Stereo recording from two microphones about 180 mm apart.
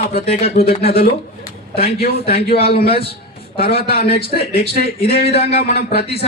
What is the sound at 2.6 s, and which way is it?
Speech, 60° left (ahead or behind).